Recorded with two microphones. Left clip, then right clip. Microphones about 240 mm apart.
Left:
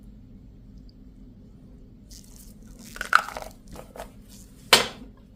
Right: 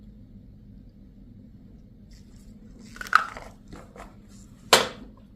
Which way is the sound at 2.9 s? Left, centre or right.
Left.